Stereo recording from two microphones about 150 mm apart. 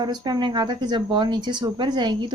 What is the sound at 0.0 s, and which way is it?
Speech, 30° right (ahead or behind).